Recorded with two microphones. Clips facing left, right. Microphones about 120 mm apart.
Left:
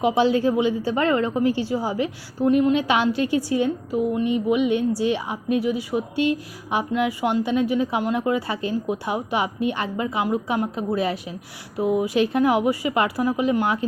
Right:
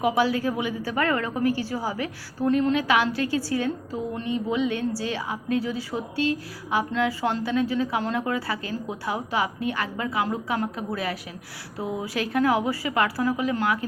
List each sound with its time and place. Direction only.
0.0 s a woman's voice: 25° left (ahead or behind)